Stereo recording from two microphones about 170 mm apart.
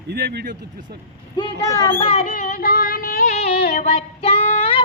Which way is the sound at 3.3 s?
35° left (ahead or behind).